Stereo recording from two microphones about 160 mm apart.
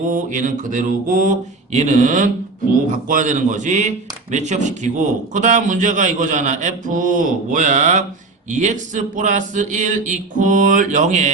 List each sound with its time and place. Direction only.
0.1 s speech: 55° right (ahead or behind)